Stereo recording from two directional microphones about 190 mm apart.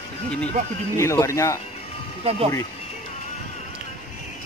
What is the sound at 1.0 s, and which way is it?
Speech, 15° left (ahead or behind).